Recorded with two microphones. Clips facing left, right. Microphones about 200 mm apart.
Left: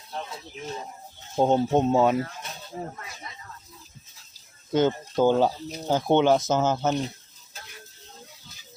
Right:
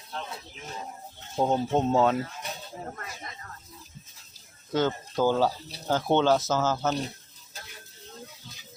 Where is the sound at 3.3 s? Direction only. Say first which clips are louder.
Even; 50° right (ahead or behind).